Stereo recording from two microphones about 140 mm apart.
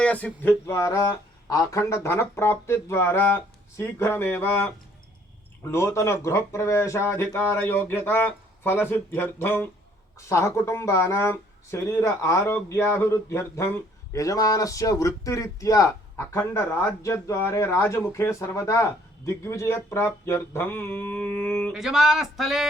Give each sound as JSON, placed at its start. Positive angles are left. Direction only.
{"t": 0.0, "sound": "a sound", "side_deg": 10}
{"t": 0.7, "sound": "a man's voice", "side_deg": 20}
{"t": 21.7, "sound": "speech", "side_deg": -5}